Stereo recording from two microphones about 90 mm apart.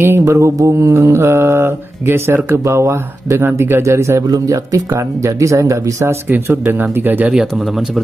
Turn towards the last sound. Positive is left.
turn(degrees=0)  # may be behind; listen again after turning